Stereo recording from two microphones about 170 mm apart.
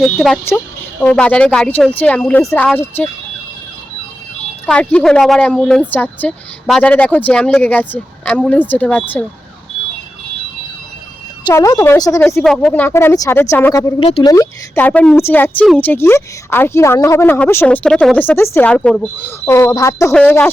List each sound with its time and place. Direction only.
0.0 s speech: centre (ahead or behind)
4.6 s speech: 5° left (ahead or behind)
11.4 s speech: 20° left (ahead or behind)
12.2 s speech: 10° left (ahead or behind)
14.0 s speech: 30° left (ahead or behind)
14.3 s speech: 10° left (ahead or behind)